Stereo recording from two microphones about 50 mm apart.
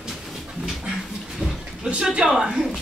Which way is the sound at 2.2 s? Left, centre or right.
Centre.